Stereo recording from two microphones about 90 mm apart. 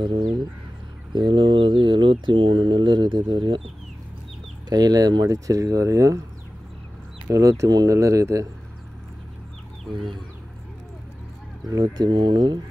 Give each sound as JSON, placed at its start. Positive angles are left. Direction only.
{"t": 0.0, "sound": "speech", "side_deg": -65}
{"t": 4.6, "sound": "speech", "side_deg": -45}
{"t": 7.3, "sound": "speech", "side_deg": -40}
{"t": 11.7, "sound": "speech", "side_deg": -50}